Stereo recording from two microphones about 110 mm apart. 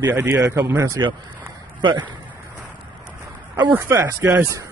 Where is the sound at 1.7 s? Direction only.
45° right (ahead or behind).